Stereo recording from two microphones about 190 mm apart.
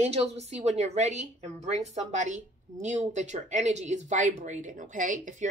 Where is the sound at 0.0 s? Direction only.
35° right (ahead or behind).